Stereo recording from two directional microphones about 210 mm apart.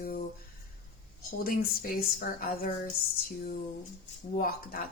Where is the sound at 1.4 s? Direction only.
45° left (ahead or behind).